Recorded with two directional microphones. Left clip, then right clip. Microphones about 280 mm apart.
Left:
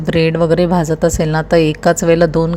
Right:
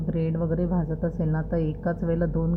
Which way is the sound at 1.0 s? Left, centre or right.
Left.